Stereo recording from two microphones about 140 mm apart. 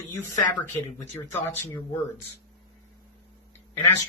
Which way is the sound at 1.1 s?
20° left (ahead or behind).